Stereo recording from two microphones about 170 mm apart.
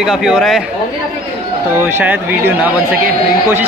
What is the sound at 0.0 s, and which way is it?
Speech, 5° right (ahead or behind).